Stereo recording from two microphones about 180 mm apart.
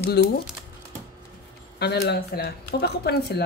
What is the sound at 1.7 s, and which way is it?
Speech, 65° left (ahead or behind).